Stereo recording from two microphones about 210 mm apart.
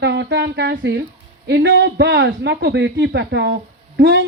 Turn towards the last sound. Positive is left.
turn(degrees=-60)  # may be behind; listen again after turning